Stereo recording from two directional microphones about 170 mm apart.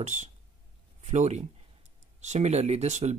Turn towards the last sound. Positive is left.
turn(degrees=-40)  # may be behind; listen again after turning